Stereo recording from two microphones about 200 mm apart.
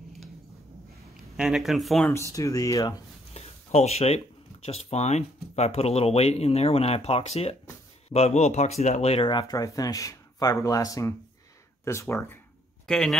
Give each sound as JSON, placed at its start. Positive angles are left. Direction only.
{"t": 1.3, "sound": "speech", "side_deg": -5}
{"t": 2.3, "sound": "speech", "side_deg": 15}
{"t": 3.3, "sound": "a sound", "side_deg": 30}
{"t": 4.6, "sound": "speech", "side_deg": 30}